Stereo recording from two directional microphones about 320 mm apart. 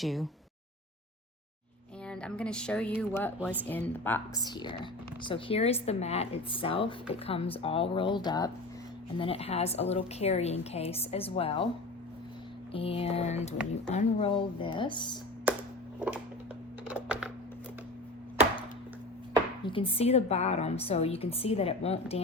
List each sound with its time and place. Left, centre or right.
0.0 s speech: centre
2.0 s a woman's voice: centre
12.7 s a woman's voice: centre
15.5 s a sound: centre
16.9 s typing: centre
19.6 s a woman's voice: centre